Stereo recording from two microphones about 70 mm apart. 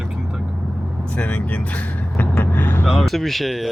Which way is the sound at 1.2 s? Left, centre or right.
Centre.